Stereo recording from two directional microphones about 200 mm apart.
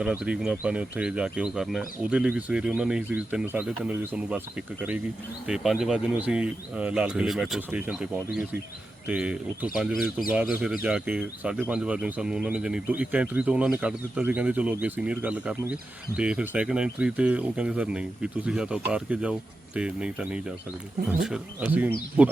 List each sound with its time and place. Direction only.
0.0 s speech: 5° right (ahead or behind)